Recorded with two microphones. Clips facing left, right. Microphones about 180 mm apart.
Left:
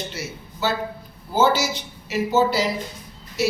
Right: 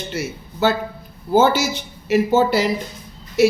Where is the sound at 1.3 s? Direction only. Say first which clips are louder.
Right 4 dB; 55° right (ahead or behind).